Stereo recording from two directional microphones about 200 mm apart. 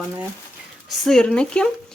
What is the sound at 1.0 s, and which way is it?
Speech, 5° left (ahead or behind).